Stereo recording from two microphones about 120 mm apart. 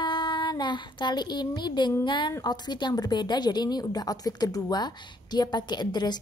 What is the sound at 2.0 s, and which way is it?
A woman's voice, 40° left (ahead or behind).